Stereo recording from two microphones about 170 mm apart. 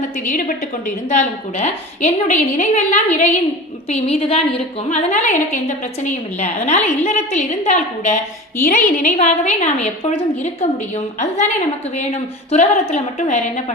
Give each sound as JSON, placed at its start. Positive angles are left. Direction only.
{"t": 0.3, "sound": "a woman's voice", "side_deg": 50}